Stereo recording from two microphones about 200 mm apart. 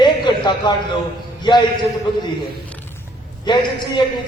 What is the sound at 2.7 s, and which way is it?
Creak, 10° left (ahead or behind).